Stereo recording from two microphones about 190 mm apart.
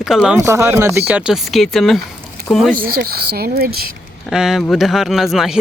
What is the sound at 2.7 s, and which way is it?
Speech, 50° right (ahead or behind).